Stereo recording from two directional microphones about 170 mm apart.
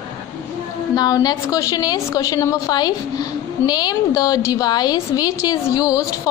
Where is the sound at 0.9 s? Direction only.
20° left (ahead or behind).